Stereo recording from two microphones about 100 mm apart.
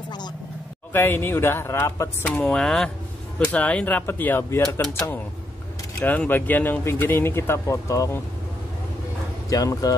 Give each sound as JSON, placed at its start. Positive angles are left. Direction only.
{"t": 0.9, "sound": "speech", "side_deg": 20}
{"t": 2.2, "sound": "speech", "side_deg": 10}
{"t": 6.0, "sound": "speech", "side_deg": 20}
{"t": 9.5, "sound": "speech", "side_deg": 35}